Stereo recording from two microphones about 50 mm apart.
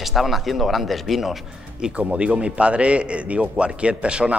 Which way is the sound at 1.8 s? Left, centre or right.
Right.